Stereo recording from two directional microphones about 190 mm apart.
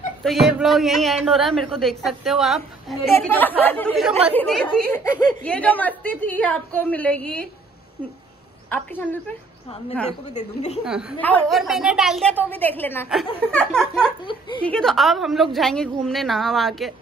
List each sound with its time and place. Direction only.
0.2 s a woman's voice: centre (ahead or behind)
3.1 s a woman's voice: 10° left (ahead or behind)
8.6 s a woman's voice: 10° left (ahead or behind)
10.3 s a woman's voice: 35° left (ahead or behind)
10.8 s a woman's voice: 5° right (ahead or behind)
11.1 s a woman's voice: 10° left (ahead or behind)